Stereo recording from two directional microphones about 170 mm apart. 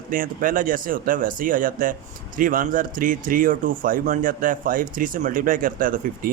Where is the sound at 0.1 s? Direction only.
55° right (ahead or behind).